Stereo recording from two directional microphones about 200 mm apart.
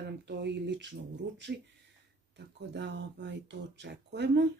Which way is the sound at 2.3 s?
60° right (ahead or behind).